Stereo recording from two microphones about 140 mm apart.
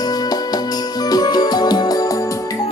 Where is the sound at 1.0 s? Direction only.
30° left (ahead or behind).